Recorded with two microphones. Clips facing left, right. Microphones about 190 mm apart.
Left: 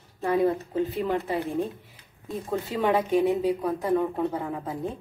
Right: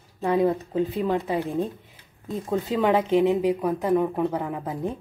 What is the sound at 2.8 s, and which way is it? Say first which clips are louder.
A woman's voice: right 2 dB; 15° right (ahead or behind).